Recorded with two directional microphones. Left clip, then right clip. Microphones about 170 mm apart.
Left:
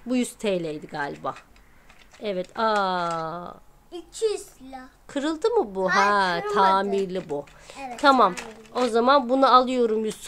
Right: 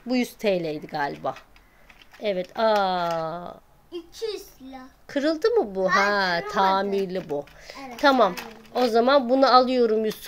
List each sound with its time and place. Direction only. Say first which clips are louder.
0.1 s speech: right 1 dB; 15° left (ahead or behind)
0.5 s speech: right 4 dB; 5° left (ahead or behind)
3.9 s a child's voice: left 5 dB; 55° left (ahead or behind)
5.0 s speech: right 2 dB; 5° left (ahead or behind)